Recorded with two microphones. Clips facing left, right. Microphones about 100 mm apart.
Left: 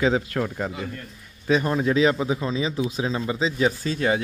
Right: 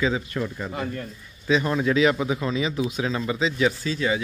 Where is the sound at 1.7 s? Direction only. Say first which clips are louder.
Even; 30° left (ahead or behind).